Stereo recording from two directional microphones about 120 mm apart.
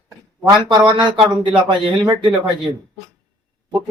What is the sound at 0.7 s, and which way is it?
Speech, 40° right (ahead or behind).